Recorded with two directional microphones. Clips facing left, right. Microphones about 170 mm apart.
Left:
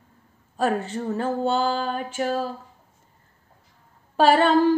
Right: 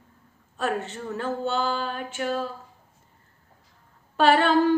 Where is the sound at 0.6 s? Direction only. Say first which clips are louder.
Left 4 dB; 35° left (ahead or behind).